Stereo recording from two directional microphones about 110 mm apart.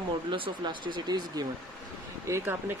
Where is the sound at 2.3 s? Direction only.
25° right (ahead or behind).